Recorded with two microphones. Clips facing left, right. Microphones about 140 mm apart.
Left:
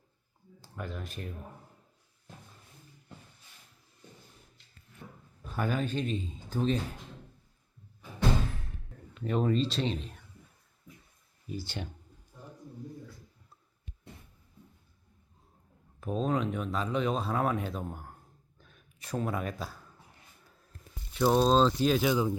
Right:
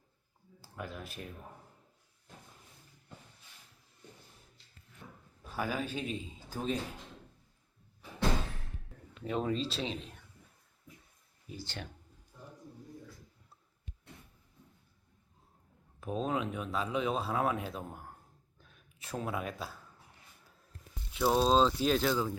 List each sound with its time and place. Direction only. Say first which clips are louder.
0.6 s speech: left 2 dB; 5° right (ahead or behind)
5.4 s a man's voice: left 4 dB; 5° right (ahead or behind)
9.2 s speech: left 5 dB; centre (ahead or behind)
11.5 s speech: left 5 dB; 10° left (ahead or behind)
16.0 s speech: left 3 dB; 5° right (ahead or behind)
18.6 s a sound: left 1 dB; centre (ahead or behind)
21.1 s speech: left 3 dB; 5° right (ahead or behind)
22.0 s speech: left 4 dB; 15° left (ahead or behind)